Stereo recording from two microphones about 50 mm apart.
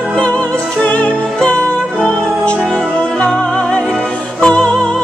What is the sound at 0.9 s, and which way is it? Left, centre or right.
Music, left.